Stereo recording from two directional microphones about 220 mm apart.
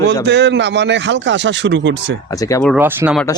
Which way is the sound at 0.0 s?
50° right (ahead or behind).